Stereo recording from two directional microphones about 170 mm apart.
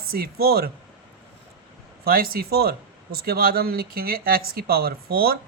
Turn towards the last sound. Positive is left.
turn(degrees=-65)  # may be behind; listen again after turning